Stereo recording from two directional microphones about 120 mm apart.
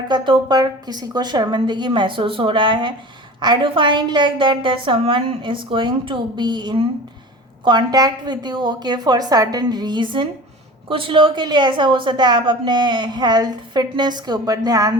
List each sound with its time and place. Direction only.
0.1 s a woman's voice: 40° right (ahead or behind)